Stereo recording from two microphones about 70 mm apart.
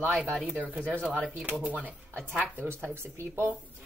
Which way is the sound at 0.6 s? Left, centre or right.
Centre.